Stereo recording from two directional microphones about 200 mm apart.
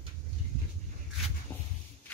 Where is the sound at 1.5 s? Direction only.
10° left (ahead or behind).